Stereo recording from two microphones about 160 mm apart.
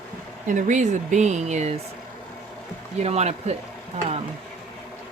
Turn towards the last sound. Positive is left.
turn(degrees=-45)  # may be behind; listen again after turning